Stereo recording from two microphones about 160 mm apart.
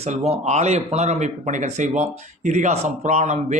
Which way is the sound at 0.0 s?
40° right (ahead or behind).